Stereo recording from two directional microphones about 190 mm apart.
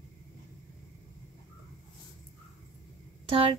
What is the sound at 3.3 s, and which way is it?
Speech, 30° right (ahead or behind).